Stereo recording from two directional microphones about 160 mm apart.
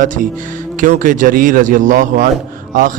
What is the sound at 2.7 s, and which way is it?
Music, 55° right (ahead or behind).